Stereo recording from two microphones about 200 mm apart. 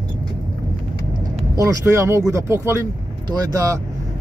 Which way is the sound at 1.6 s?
15° right (ahead or behind).